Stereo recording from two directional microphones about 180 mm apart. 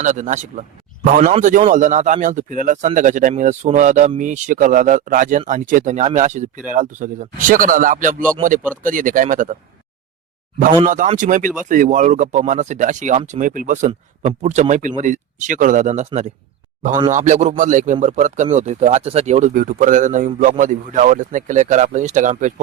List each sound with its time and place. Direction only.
0.0 s speech: 45° right (ahead or behind)
10.8 s speech: 45° right (ahead or behind)